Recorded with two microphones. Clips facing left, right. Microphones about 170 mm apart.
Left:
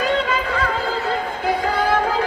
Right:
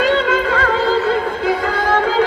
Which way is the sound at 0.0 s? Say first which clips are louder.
Right 5 dB; 70° right (ahead or behind).